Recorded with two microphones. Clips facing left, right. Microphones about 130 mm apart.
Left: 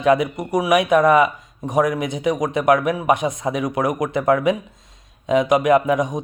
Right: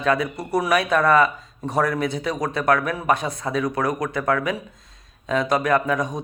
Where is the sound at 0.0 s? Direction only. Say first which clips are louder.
Left 5 dB; 20° left (ahead or behind).